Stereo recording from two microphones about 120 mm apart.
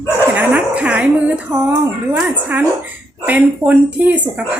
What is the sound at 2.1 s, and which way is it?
Speech, 15° right (ahead or behind).